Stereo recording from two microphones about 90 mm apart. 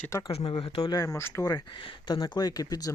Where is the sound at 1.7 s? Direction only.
70° left (ahead or behind).